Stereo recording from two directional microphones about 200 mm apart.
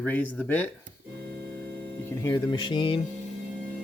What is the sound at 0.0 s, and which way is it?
Speech, 10° left (ahead or behind).